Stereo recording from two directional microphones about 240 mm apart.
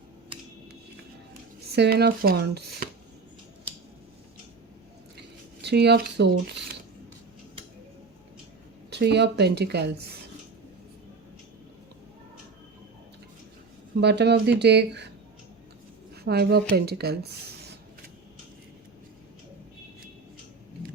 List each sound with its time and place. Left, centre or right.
1.7 s speech: right
5.6 s a woman's voice: right
8.9 s a woman's voice: right
13.9 s a woman's voice: right
16.2 s speech: right